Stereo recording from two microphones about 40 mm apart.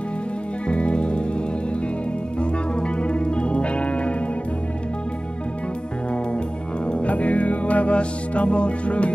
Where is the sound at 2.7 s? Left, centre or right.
Left.